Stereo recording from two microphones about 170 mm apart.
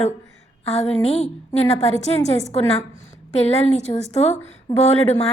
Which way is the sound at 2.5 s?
35° left (ahead or behind).